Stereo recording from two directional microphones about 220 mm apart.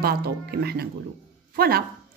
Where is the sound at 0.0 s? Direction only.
45° right (ahead or behind).